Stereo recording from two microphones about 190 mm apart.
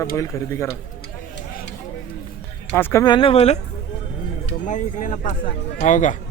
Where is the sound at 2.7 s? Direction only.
15° left (ahead or behind); by 3.6 s 35° left (ahead or behind).